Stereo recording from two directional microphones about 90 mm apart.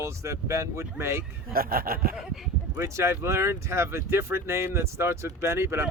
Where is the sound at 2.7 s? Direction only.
30° right (ahead or behind).